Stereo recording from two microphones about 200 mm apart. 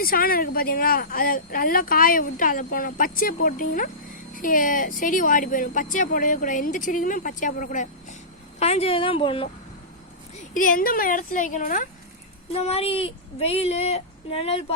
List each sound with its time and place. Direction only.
0.0 s a woman's voice: 45° left (ahead or behind); by 9.5 s 25° left (ahead or behind)
10.5 s speech: 40° left (ahead or behind)
12.5 s speech: 30° left (ahead or behind)